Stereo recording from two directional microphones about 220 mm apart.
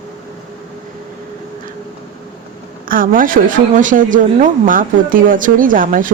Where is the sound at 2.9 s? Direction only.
40° right (ahead or behind).